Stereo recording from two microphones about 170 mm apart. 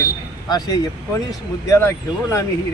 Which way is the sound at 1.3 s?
15° left (ahead or behind).